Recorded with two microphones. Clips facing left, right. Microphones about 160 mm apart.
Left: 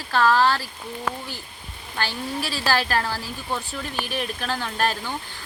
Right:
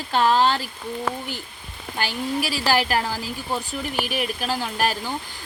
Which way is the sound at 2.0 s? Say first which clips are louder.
Right 3 dB; 15° right (ahead or behind).